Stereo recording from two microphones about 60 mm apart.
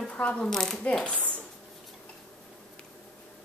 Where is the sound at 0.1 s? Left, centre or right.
Centre.